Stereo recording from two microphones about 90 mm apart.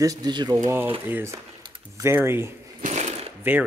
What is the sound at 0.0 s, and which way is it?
Speech, 40° right (ahead or behind).